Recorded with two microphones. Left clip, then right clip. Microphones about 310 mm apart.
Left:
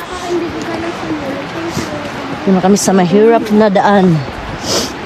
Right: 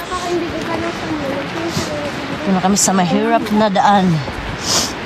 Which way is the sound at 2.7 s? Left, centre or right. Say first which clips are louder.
Left 5 dB; centre.